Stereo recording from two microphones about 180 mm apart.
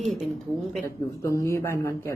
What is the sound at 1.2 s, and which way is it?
Speech, 15° left (ahead or behind).